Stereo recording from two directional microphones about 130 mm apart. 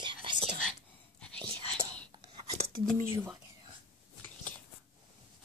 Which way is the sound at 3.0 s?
20° right (ahead or behind).